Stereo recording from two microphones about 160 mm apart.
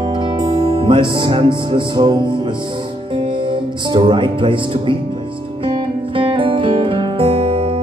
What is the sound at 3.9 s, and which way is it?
Speech, 30° right (ahead or behind).